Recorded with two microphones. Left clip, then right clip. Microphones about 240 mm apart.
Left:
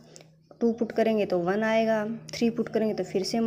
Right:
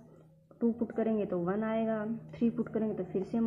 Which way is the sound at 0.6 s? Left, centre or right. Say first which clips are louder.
Left 7 dB; left.